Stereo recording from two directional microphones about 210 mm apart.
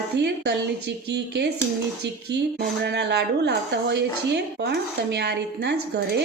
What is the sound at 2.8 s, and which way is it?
A woman's voice, 55° right (ahead or behind).